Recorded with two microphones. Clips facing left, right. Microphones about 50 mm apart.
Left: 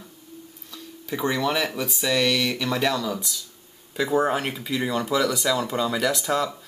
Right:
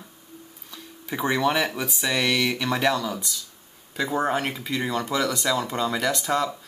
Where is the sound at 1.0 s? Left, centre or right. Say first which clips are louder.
Right 1 dB; centre.